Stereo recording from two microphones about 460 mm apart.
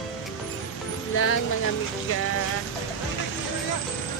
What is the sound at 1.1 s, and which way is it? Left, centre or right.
Speech, left.